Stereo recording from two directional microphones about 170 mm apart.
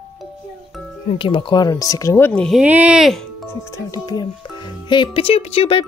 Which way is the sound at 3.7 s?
20° left (ahead or behind).